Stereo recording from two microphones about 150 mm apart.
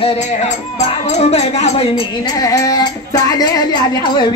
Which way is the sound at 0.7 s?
45° left (ahead or behind).